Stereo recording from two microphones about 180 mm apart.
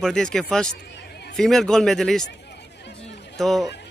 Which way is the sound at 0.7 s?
70° left (ahead or behind).